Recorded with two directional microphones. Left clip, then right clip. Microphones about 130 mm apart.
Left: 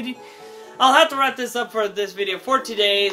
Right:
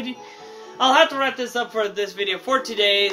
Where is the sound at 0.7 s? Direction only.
40° left (ahead or behind).